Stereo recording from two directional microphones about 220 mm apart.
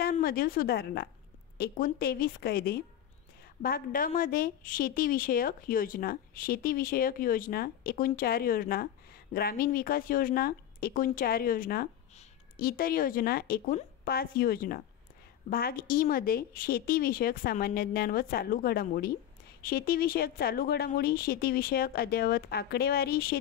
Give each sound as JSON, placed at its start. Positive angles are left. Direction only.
{"t": 0.0, "sound": "a woman's voice", "side_deg": 40}